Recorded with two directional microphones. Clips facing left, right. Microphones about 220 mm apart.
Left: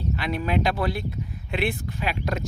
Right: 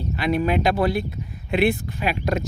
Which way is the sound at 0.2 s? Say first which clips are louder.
Right 6 dB; 15° right (ahead or behind).